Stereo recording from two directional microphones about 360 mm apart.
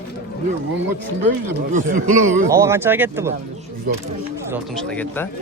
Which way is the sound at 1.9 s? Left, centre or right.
Right.